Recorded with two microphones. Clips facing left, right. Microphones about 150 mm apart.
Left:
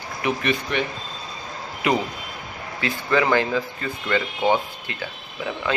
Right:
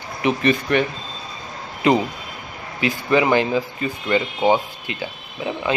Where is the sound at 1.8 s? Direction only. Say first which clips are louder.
Right 5 dB; 30° right (ahead or behind).